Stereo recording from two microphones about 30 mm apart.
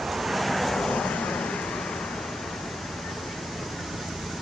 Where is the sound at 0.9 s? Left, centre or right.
Left.